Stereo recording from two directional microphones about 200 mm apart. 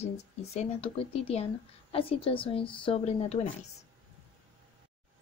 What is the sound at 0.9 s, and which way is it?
Speech, 30° left (ahead or behind).